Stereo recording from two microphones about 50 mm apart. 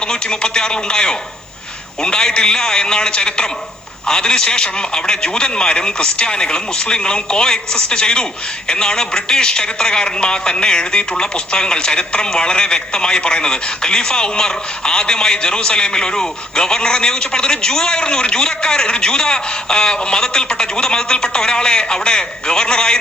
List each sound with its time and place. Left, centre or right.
0.1 s a man's voice: centre